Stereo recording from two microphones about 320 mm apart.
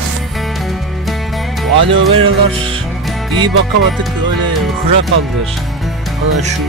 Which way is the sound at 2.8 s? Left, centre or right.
Centre.